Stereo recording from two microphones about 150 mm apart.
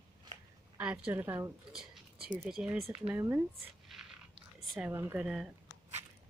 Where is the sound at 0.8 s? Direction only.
5° right (ahead or behind).